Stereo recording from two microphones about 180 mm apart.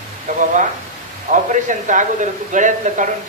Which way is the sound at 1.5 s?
45° right (ahead or behind).